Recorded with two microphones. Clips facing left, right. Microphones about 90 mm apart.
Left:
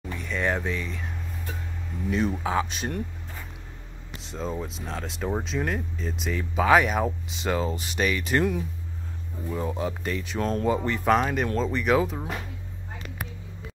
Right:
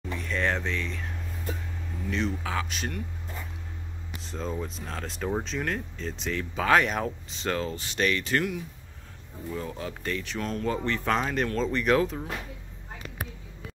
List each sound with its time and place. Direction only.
0.2 s a sound: 5° left (ahead or behind)
2.0 s speech: 10° left (ahead or behind)
2.4 s speech: 25° left (ahead or behind)
4.2 s speech: centre (ahead or behind)
8.4 s speech: 35° left (ahead or behind)
9.5 s speech: 20° left (ahead or behind)
10.4 s speech: 30° left (ahead or behind)
10.7 s speech: 10° left (ahead or behind)
11.7 s speech: 5° left (ahead or behind)